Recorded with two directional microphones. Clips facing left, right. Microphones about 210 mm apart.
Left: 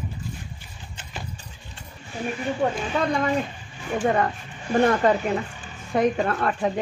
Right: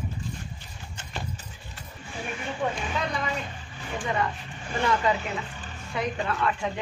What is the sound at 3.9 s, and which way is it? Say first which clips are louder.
A woman's voice: left 7 dB; 55° left (ahead or behind).